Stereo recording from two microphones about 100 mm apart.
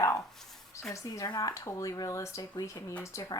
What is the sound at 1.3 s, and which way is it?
Speech, 35° left (ahead or behind).